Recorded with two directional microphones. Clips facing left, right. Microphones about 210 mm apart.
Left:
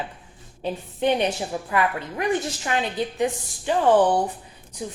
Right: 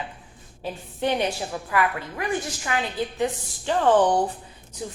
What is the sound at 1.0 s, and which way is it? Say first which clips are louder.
A woman's voice: left 2 dB; 20° left (ahead or behind).